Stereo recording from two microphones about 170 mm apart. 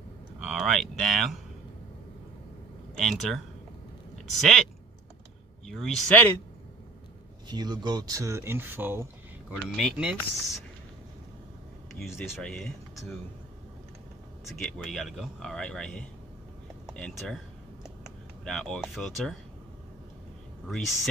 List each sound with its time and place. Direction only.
0.4 s speech: centre (ahead or behind)
3.0 s speech: centre (ahead or behind)
5.7 s speech: centre (ahead or behind)
7.4 s speech: 25° right (ahead or behind); by 10.1 s 5° right (ahead or behind)
12.2 s speech: 5° left (ahead or behind)
14.6 s speech: centre (ahead or behind)
17.8 s typing: centre (ahead or behind)
20.7 s speech: centre (ahead or behind)